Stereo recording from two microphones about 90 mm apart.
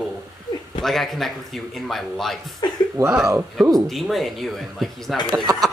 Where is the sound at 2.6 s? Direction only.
55° left (ahead or behind).